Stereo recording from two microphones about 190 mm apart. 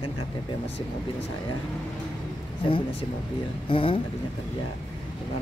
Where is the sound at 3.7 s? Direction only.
25° left (ahead or behind).